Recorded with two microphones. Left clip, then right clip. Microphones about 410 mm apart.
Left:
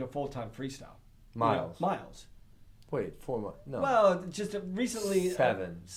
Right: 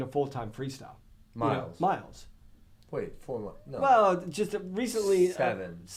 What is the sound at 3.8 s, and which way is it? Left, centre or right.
Speech, right.